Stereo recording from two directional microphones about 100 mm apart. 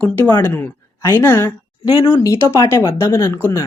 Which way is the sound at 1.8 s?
50° left (ahead or behind).